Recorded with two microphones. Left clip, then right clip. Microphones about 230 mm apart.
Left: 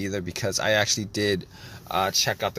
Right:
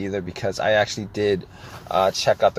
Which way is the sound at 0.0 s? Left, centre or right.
Left.